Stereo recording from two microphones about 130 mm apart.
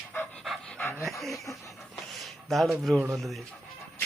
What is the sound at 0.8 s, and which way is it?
Dog, 15° left (ahead or behind).